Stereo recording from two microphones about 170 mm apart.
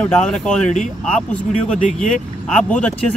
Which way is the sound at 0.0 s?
5° left (ahead or behind).